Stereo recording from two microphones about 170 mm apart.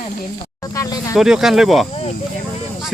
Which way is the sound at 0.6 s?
20° left (ahead or behind).